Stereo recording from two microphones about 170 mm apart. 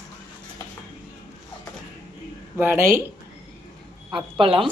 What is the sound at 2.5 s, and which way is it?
Speech, 15° right (ahead or behind).